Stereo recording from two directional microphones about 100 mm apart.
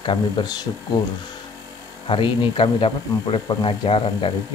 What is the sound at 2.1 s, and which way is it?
Speech, 55° left (ahead or behind).